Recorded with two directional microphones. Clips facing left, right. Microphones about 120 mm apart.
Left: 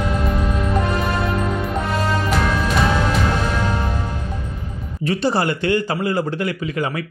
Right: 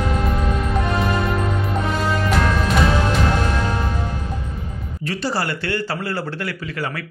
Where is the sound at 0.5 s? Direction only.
Centre (ahead or behind).